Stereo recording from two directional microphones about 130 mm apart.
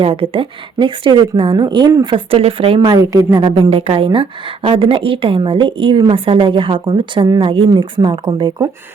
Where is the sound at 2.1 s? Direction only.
45° right (ahead or behind).